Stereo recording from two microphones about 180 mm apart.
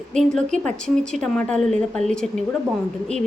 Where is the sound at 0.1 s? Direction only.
Centre (ahead or behind).